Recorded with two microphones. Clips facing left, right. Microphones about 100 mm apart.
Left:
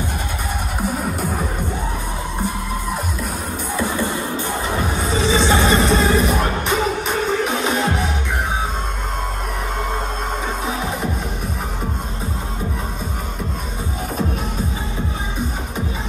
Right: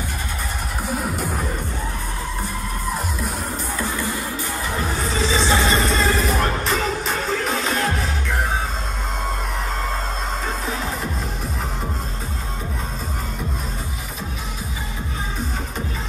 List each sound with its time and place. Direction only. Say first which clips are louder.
3.7 s music: left 6 dB; 20° left (ahead or behind)